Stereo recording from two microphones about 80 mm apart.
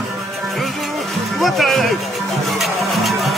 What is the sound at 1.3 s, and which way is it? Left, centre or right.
Music, centre.